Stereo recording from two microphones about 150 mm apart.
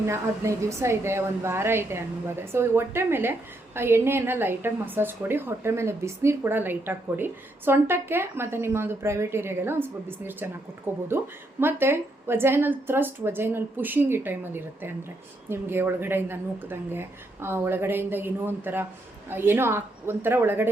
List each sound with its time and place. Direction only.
0.0 s a woman's voice: 20° right (ahead or behind)